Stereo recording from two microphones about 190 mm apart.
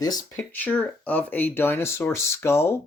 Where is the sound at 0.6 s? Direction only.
10° left (ahead or behind).